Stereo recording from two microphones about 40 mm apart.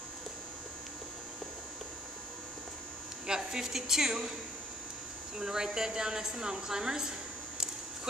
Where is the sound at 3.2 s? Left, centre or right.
Centre.